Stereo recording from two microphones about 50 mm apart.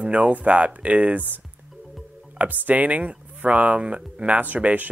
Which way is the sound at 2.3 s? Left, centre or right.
Right.